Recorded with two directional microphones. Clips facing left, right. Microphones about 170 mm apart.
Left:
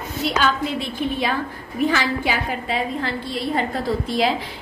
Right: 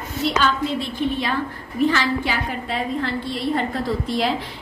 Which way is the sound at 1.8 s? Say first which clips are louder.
Even; 10° left (ahead or behind).